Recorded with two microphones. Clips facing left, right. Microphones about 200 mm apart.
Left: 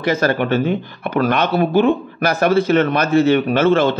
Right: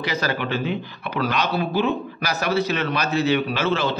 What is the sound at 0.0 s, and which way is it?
Speech, 50° left (ahead or behind).